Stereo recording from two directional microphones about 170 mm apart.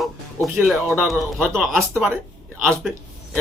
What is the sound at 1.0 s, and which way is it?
Speech, centre (ahead or behind).